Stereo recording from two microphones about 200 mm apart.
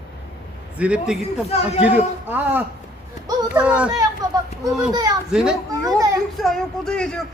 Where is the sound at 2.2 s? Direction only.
10° right (ahead or behind).